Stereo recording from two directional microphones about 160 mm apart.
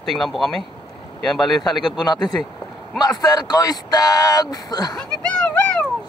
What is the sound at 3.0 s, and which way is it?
Speech, 25° left (ahead or behind).